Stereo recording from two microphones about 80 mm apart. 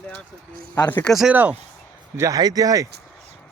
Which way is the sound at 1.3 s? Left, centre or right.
Centre.